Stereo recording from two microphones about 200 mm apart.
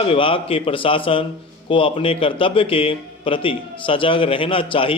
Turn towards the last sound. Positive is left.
turn(degrees=25)  # may be behind; listen again after turning